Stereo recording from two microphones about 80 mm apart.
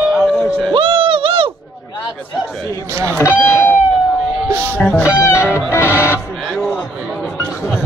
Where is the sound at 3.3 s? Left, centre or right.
Left.